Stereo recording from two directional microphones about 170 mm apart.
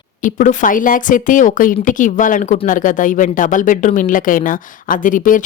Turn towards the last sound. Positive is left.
turn(degrees=50)  # may be behind; listen again after turning